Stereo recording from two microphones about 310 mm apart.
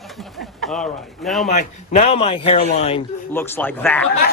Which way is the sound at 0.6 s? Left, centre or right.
Centre.